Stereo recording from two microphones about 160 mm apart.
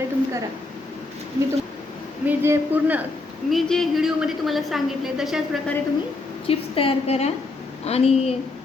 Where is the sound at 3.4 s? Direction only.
Centre (ahead or behind).